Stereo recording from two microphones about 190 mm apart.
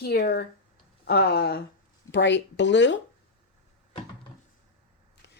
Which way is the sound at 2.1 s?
70° left (ahead or behind).